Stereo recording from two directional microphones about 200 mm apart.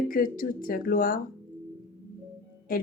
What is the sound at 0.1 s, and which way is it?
A woman's voice, 45° left (ahead or behind).